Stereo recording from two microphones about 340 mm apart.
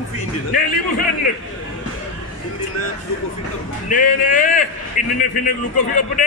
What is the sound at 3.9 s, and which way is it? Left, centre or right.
A man's voice, left.